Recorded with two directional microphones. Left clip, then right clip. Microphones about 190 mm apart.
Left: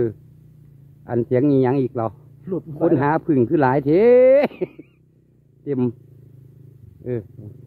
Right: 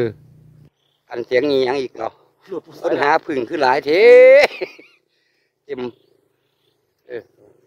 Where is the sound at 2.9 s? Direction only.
Centre (ahead or behind).